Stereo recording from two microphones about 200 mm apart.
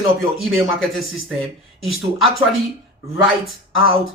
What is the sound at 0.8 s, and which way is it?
Speech, centre (ahead or behind).